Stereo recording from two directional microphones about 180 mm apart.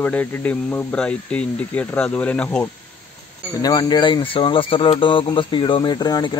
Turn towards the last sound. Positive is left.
turn(degrees=25)  # may be behind; listen again after turning